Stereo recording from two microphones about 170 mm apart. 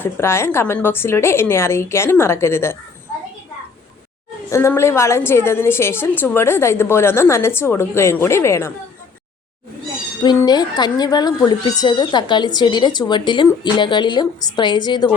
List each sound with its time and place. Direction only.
0.0 s a woman's voice: 15° left (ahead or behind)
4.4 s a woman's voice: 15° left (ahead or behind)
10.2 s speech: 25° left (ahead or behind)